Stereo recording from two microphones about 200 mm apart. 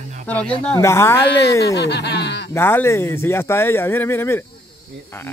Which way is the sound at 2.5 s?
10° left (ahead or behind).